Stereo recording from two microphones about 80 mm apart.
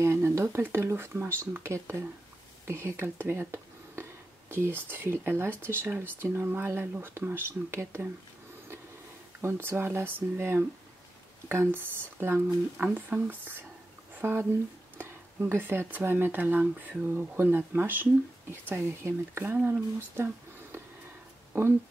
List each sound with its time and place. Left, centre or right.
0.0 s speech: right
9.4 s speech: right
19.6 s speech: centre